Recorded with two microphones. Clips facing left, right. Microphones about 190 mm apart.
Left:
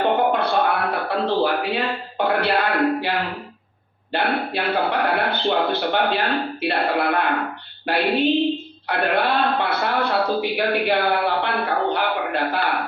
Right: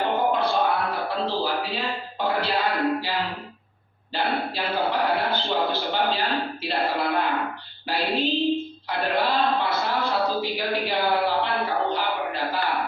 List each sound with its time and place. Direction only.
0.0 s music: 60° left (ahead or behind)
4.1 s a man's voice: 60° left (ahead or behind)
8.9 s a sound: 65° left (ahead or behind)